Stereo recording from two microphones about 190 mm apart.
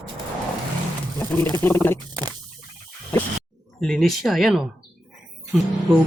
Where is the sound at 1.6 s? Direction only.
10° left (ahead or behind).